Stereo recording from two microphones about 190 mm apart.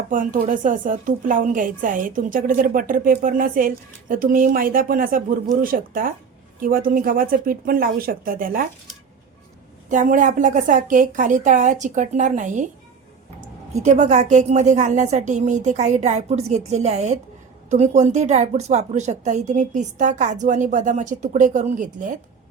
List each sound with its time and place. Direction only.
0.1 s a woman's voice: 45° right (ahead or behind)
9.9 s a woman's voice: 40° right (ahead or behind)
13.7 s a woman's voice: 40° right (ahead or behind)